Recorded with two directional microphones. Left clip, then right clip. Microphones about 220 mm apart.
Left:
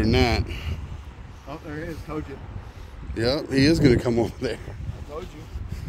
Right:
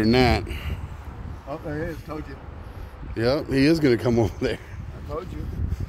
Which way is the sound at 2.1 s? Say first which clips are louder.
Left 2 dB; 40° right (ahead or behind).